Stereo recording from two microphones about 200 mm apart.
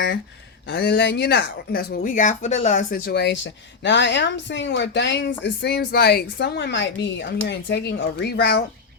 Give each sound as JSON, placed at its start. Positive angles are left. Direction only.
{"t": 0.7, "sound": "speech", "side_deg": 55}